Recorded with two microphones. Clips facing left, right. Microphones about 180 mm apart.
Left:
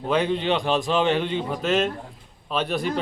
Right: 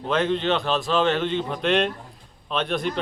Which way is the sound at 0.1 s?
10° left (ahead or behind).